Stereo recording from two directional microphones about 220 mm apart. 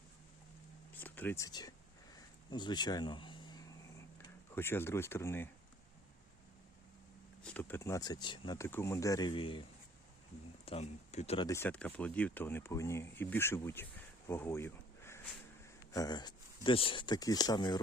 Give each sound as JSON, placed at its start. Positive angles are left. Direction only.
{"t": 0.9, "sound": "speech", "side_deg": 10}
{"t": 2.1, "sound": "a sound", "side_deg": 20}
{"t": 4.5, "sound": "speech", "side_deg": 10}
{"t": 7.4, "sound": "speech", "side_deg": 5}
{"t": 10.7, "sound": "speech", "side_deg": 30}
{"t": 11.4, "sound": "speech", "side_deg": 10}
{"t": 14.3, "sound": "a sound", "side_deg": 10}
{"t": 15.9, "sound": "speech", "side_deg": 15}